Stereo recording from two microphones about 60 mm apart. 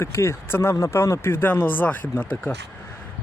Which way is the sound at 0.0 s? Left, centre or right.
Left.